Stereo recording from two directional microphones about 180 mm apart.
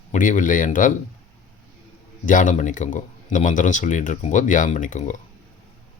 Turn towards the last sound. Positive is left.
turn(degrees=40)  # may be behind; listen again after turning